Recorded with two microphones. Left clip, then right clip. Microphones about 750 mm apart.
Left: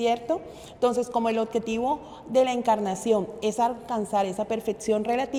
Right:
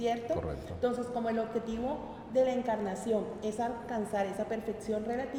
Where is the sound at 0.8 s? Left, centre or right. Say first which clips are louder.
Left 9 dB; left.